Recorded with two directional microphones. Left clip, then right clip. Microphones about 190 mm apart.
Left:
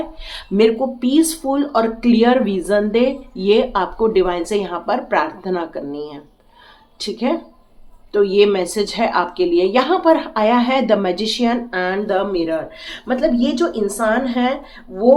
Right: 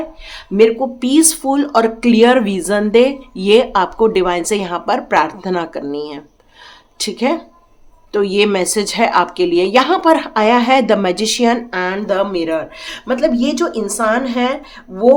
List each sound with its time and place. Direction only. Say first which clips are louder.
0.3 s speech: right 3 dB; 20° right (ahead or behind)
0.9 s speech: right 3 dB; 35° right (ahead or behind)